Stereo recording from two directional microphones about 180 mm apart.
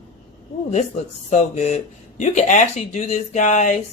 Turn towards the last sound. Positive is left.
turn(degrees=40)  # may be behind; listen again after turning